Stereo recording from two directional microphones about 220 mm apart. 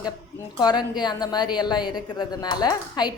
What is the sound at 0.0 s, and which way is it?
A woman's voice, 20° left (ahead or behind).